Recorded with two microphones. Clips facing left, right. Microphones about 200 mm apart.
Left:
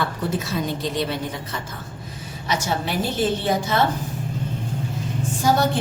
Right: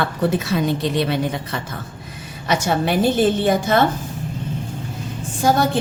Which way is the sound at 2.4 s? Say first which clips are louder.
Right 5 dB; 55° right (ahead or behind).